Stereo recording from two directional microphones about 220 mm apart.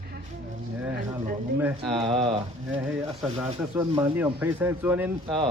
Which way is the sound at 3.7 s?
10° right (ahead or behind).